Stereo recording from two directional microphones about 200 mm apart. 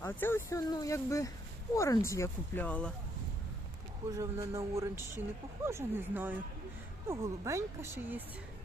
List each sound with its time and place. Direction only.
0.0 s speech: 10° left (ahead or behind)
4.1 s speech: 15° right (ahead or behind)